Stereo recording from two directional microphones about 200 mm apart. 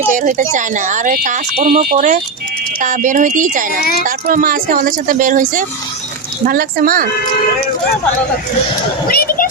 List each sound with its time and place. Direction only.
0.1 s speech: 40° right (ahead or behind)
3.8 s a child's voice: 50° left (ahead or behind)
4.0 s speech: 45° right (ahead or behind)
9.0 s a woman's voice: 45° left (ahead or behind)